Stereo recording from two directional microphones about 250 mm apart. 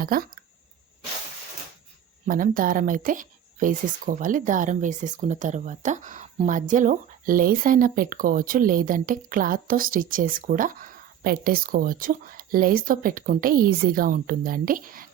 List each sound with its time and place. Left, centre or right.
0.0 s speech: right
2.2 s speech: right